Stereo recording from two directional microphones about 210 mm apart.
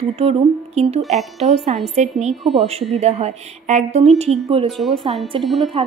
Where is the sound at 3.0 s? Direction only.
30° right (ahead or behind).